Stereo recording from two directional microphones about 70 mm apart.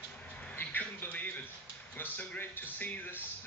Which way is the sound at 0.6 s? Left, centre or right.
Left.